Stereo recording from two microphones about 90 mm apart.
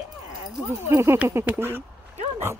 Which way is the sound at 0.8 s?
30° right (ahead or behind).